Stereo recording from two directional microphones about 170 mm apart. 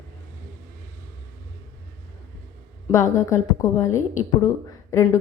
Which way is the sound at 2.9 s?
20° left (ahead or behind).